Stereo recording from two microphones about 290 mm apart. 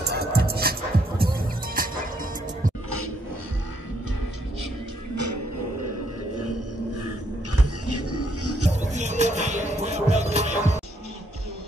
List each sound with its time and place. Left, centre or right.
0.0 s music: right
5.1 s music: right
7.5 s music: right
8.8 s music: right